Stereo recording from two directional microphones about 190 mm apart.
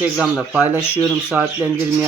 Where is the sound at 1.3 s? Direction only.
10° right (ahead or behind).